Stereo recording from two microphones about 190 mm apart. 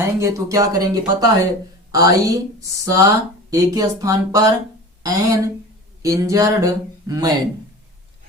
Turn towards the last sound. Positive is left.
turn(degrees=-20)  # may be behind; listen again after turning